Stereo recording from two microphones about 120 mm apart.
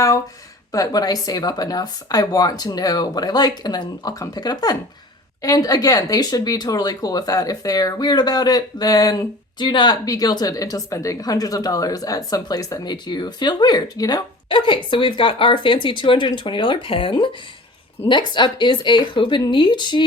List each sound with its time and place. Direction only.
0.7 s speech: 30° left (ahead or behind)
14.5 s speech: 40° left (ahead or behind)